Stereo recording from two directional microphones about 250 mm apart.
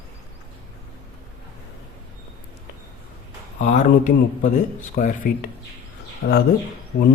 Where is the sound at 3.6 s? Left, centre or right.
Left.